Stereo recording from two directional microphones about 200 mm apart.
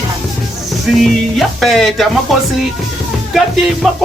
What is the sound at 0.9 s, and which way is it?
Music, centre (ahead or behind).